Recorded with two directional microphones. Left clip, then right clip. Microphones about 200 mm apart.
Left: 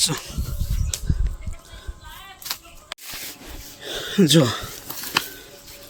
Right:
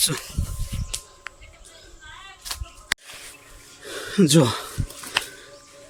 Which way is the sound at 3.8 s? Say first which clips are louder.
Left 2 dB; centre (ahead or behind).